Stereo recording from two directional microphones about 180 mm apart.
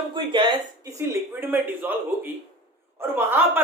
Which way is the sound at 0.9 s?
10° right (ahead or behind).